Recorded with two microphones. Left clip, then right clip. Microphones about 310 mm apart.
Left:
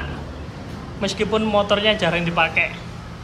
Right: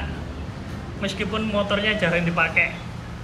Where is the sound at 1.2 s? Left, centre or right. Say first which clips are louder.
Left 6 dB; centre.